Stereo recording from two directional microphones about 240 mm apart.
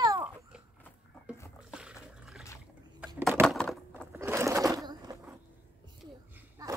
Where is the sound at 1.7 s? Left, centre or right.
Centre.